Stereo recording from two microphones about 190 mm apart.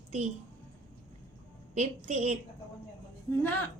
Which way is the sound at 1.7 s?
35° right (ahead or behind).